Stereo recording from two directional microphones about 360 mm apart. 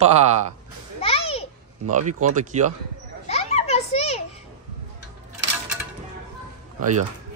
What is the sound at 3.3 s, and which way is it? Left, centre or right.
Children playing, centre.